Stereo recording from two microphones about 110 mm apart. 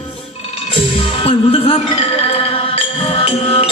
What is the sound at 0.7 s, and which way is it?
Music, 55° left (ahead or behind).